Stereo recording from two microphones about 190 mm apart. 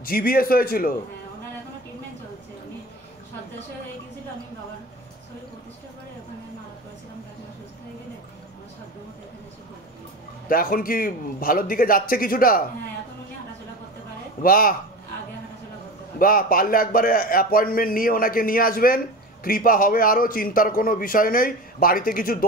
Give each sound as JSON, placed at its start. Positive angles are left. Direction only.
{"t": 0.0, "sound": "a man's voice", "side_deg": 50}
{"t": 10.5, "sound": "a man's voice", "side_deg": 50}
{"t": 14.4, "sound": "a man's voice", "side_deg": 50}
{"t": 16.2, "sound": "a man's voice", "side_deg": 50}